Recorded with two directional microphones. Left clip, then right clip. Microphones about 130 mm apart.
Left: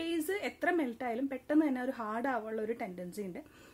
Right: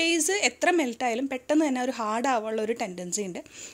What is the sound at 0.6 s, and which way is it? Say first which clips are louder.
A woman's voice: right 8 dB; 25° right (ahead or behind).